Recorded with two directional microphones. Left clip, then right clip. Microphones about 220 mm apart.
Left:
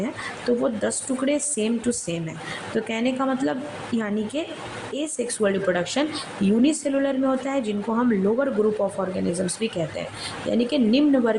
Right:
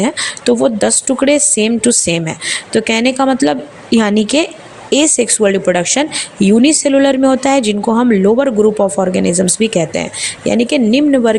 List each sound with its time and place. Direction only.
0.0 s speech: 35° right (ahead or behind)